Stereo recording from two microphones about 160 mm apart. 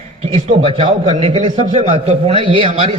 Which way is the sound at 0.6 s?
30° right (ahead or behind).